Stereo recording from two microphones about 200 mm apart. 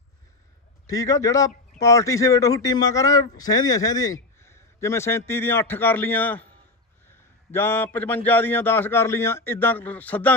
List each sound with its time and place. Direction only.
0.8 s a man's voice: 15° left (ahead or behind)